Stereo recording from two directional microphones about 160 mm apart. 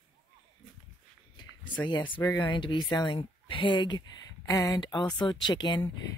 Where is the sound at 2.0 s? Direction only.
10° left (ahead or behind).